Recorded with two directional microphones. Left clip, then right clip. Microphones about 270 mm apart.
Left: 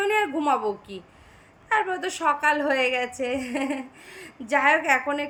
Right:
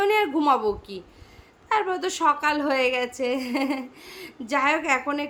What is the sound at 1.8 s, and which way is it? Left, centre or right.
A woman's voice, centre.